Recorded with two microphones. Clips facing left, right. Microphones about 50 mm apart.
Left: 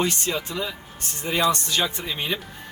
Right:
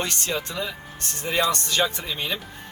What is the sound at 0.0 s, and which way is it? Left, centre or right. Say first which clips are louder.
Speech: left 2 dB; centre.